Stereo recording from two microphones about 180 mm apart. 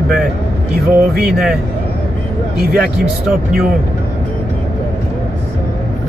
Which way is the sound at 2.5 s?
60° right (ahead or behind).